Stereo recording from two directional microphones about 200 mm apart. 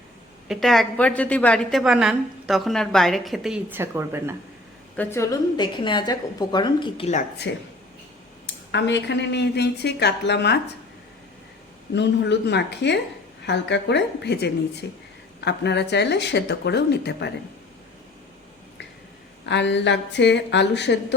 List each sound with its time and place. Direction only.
0.4 s a woman's voice: centre (ahead or behind)
4.9 s a woman's voice: 15° left (ahead or behind); by 7.3 s 35° left (ahead or behind)
7.5 s speech: 60° left (ahead or behind)
11.9 s speech: 60° left (ahead or behind)
19.5 s speech: 60° left (ahead or behind)